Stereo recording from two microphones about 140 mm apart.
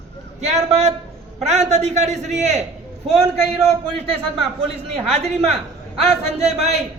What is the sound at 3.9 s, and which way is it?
A man's voice, 45° right (ahead or behind).